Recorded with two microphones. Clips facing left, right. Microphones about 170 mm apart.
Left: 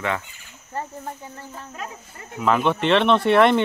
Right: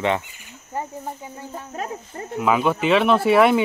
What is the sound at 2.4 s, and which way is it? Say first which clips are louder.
Speech: right 1 dB; 5° right (ahead or behind).